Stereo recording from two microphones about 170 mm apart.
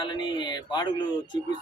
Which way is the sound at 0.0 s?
30° left (ahead or behind).